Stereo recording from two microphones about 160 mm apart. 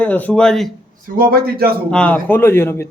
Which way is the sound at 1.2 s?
70° right (ahead or behind).